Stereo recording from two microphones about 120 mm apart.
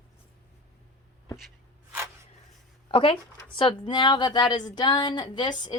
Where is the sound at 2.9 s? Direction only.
45° left (ahead or behind).